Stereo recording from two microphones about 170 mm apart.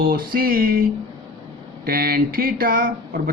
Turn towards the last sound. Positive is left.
turn(degrees=-55)  # may be behind; listen again after turning